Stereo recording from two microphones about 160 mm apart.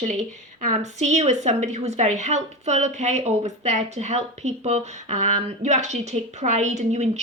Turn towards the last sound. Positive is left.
turn(degrees=-45)  # may be behind; listen again after turning